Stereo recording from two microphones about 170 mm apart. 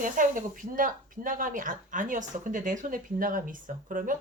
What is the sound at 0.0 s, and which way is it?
Speech, 50° right (ahead or behind).